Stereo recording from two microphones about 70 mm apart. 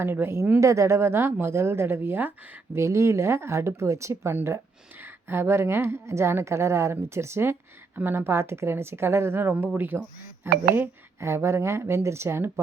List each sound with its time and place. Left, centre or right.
0.0 s a woman's voice: right
0.6 s a woman's voice: right
2.7 s a woman's voice: right
11.2 s a woman's voice: right